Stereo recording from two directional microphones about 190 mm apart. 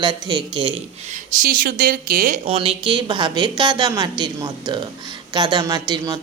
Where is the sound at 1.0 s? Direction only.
45° right (ahead or behind).